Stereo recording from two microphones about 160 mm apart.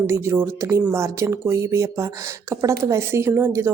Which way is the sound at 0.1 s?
15° right (ahead or behind).